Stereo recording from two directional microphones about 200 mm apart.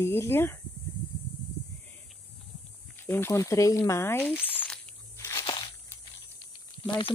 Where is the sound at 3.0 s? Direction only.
10° left (ahead or behind).